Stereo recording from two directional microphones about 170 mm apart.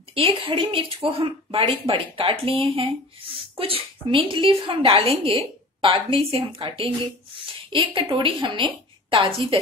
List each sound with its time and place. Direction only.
0.1 s a woman's voice: 35° right (ahead or behind)